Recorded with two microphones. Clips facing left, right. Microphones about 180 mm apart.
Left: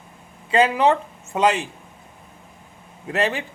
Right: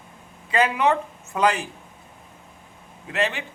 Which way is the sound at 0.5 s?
30° left (ahead or behind).